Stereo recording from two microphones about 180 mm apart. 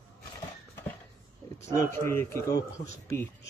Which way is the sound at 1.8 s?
15° left (ahead or behind).